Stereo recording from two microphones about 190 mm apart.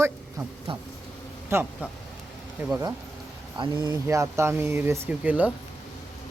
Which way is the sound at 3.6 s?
25° right (ahead or behind).